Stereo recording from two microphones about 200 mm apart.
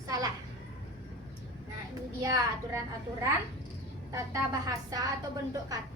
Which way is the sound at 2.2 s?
15° right (ahead or behind).